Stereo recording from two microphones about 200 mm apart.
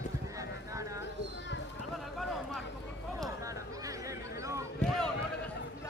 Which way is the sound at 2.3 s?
Centre (ahead or behind).